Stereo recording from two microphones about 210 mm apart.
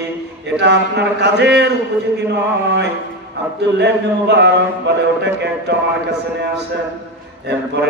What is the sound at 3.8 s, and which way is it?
A man's voice, 55° right (ahead or behind).